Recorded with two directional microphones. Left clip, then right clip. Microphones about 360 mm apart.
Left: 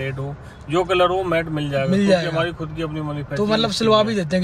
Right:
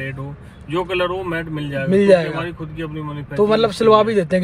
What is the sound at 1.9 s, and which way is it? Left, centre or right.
A man's voice, centre.